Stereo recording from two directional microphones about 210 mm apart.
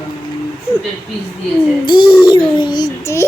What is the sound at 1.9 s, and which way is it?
A child's voice, 20° left (ahead or behind).